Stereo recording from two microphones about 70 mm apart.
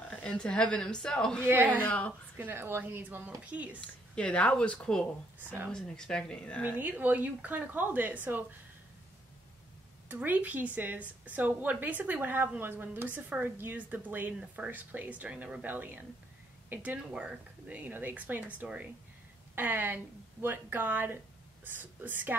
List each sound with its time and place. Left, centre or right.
0.1 s speech: centre
1.4 s a woman's voice: right
1.8 s a woman's voice: left
2.3 s a woman's voice: right
4.1 s speech: centre
6.6 s a woman's voice: right
10.0 s a woman's voice: right
17.1 s a woman's voice: centre